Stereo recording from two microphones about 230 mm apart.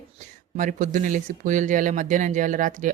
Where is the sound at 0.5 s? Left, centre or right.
Right.